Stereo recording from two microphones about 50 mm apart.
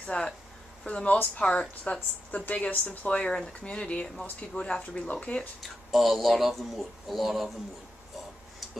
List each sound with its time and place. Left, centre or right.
0.0 s speech: left
1.1 s speech: left
5.6 s speech: centre